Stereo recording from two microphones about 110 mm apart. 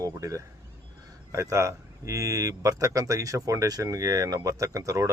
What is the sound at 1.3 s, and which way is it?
Speech, 30° right (ahead or behind).